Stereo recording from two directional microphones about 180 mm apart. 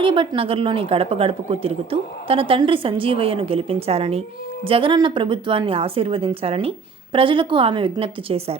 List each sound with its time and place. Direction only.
0.0 s a woman's voice: 30° right (ahead or behind)